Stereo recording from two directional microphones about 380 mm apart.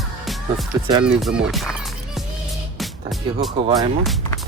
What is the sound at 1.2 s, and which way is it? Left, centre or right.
Music, centre.